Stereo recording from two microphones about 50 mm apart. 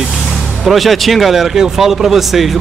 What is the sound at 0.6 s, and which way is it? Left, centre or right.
Speech, centre.